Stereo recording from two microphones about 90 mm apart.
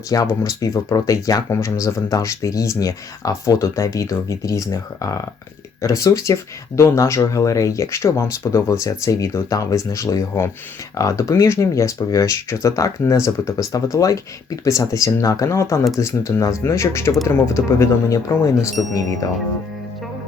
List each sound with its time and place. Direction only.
0.1 s speech: 35° left (ahead or behind)